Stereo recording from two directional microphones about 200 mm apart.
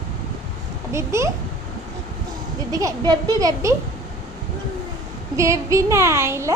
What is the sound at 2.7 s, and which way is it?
Speech, 15° right (ahead or behind).